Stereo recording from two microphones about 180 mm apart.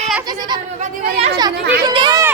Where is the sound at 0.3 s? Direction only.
25° right (ahead or behind).